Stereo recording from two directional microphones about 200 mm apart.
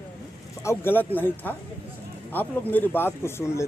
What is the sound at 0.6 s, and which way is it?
Speech, 10° left (ahead or behind).